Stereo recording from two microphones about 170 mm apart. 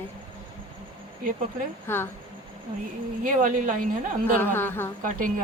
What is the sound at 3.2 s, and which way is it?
Speech, 50° right (ahead or behind).